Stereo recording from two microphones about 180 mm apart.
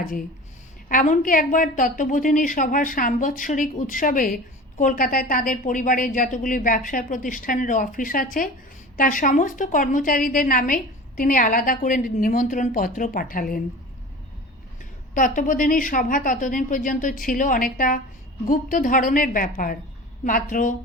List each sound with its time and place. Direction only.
0.9 s a woman's voice: 45° left (ahead or behind)
15.1 s a woman's voice: 45° left (ahead or behind)